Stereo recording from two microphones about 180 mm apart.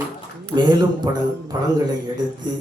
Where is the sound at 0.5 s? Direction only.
25° right (ahead or behind).